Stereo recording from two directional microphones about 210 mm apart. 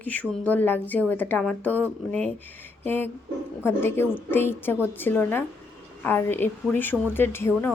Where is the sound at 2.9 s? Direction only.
10° left (ahead or behind).